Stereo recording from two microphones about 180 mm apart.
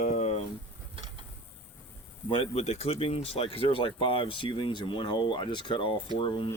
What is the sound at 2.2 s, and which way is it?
Speech, 30° left (ahead or behind).